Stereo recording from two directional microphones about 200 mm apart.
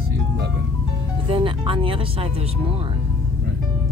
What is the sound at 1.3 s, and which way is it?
Speech, 25° right (ahead or behind).